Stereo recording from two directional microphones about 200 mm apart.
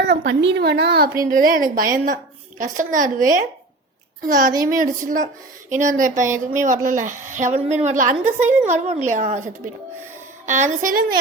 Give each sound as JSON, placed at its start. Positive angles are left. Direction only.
{"t": 0.1, "sound": "a woman's voice", "side_deg": -60}